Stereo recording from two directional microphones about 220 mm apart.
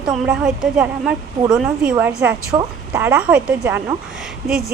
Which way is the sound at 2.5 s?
15° right (ahead or behind).